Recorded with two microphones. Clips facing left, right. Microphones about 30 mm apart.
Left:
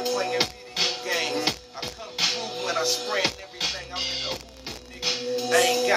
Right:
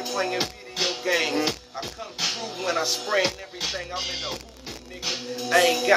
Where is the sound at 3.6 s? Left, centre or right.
Left.